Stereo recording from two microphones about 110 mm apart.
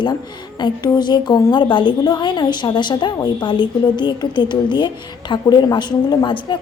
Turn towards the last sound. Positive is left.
turn(degrees=40)  # may be behind; listen again after turning